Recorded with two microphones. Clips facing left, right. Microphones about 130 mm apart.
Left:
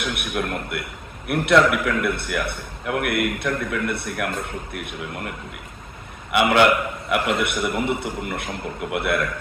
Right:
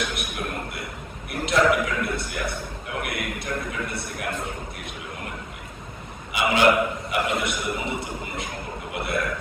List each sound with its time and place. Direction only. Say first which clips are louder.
0.0 s a man's voice: left 4 dB; 60° left (ahead or behind)
6.3 s a man's voice: left 3 dB; 60° left (ahead or behind)